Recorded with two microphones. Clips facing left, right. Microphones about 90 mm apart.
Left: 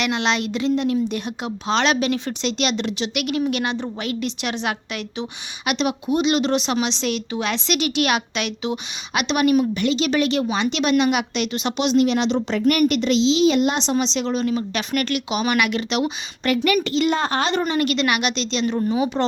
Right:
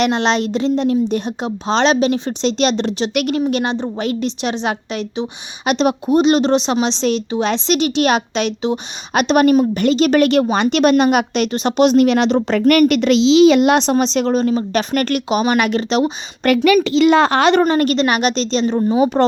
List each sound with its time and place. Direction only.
0.0 s a woman's voice: 35° right (ahead or behind)
5.6 s a woman's voice: 40° right (ahead or behind)
16.5 s a woman's voice: 75° right (ahead or behind)
17.6 s a woman's voice: 45° right (ahead or behind)
18.6 s a woman's voice: 30° right (ahead or behind)